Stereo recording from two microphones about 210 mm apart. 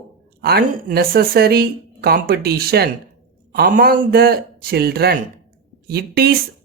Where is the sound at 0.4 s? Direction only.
45° right (ahead or behind).